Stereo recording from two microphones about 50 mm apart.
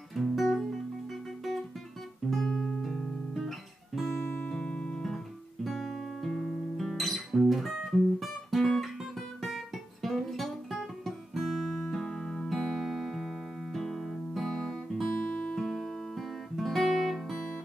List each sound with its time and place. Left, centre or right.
0.1 s guitar: centre
2.3 s guitar: centre
4.4 s music: centre
5.0 s guitar: centre
8.5 s music: centre
10.0 s guitar: centre
11.9 s music: centre
15.5 s guitar: centre